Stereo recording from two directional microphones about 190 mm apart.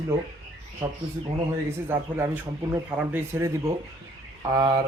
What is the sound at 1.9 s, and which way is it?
Speech, 10° right (ahead or behind).